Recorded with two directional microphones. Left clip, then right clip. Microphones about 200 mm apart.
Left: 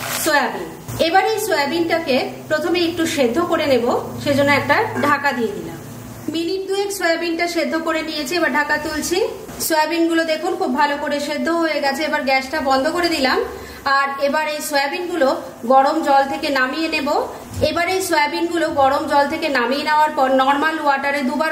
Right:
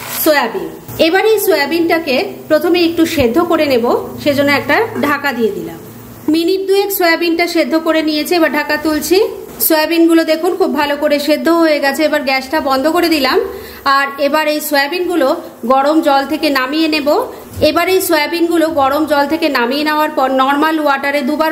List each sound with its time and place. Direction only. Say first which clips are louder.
0.2 s a woman's voice: right 6 dB; 35° right (ahead or behind)
6.3 s a woman's voice: right 9 dB; 40° right (ahead or behind)